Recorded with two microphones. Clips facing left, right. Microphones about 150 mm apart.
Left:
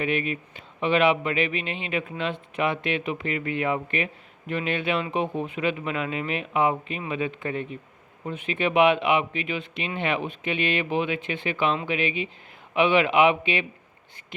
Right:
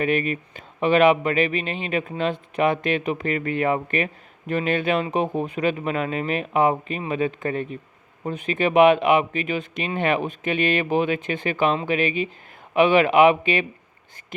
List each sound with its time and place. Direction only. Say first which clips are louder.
0.0 s speech: right 4 dB; 45° right (ahead or behind)